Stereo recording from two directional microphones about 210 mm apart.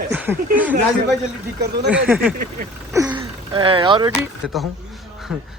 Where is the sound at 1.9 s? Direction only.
5° right (ahead or behind).